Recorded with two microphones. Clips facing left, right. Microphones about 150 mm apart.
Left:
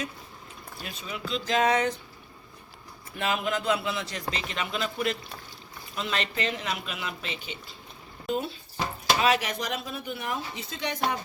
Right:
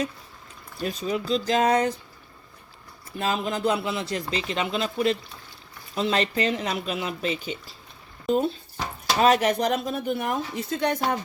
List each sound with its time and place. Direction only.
0.8 s speech: 40° right (ahead or behind)
3.2 s speech: 30° right (ahead or behind)
9.2 s speech: 45° right (ahead or behind)